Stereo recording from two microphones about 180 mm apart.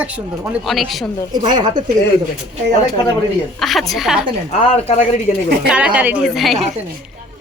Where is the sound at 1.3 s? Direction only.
25° right (ahead or behind).